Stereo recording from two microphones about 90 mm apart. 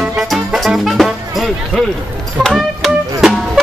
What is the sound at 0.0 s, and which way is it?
Music, 5° right (ahead or behind).